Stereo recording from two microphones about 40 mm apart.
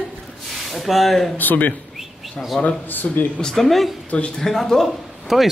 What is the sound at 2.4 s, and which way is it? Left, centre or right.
Speech, centre.